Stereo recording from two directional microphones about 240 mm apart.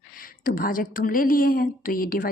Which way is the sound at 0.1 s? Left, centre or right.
Left.